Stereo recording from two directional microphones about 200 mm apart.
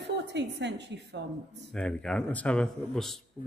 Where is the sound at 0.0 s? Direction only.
60° right (ahead or behind).